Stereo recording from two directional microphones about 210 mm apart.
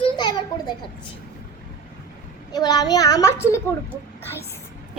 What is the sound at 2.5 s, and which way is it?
A child's voice, 20° left (ahead or behind).